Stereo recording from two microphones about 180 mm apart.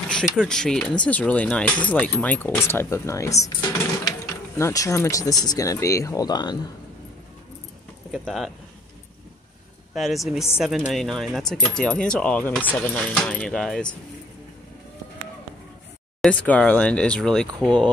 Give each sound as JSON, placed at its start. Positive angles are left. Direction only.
{"t": 0.1, "sound": "speech", "side_deg": 5}
{"t": 4.6, "sound": "speech", "side_deg": 15}
{"t": 8.1, "sound": "speech", "side_deg": 0}
{"t": 9.9, "sound": "speech", "side_deg": 0}
{"t": 16.2, "sound": "speech", "side_deg": 5}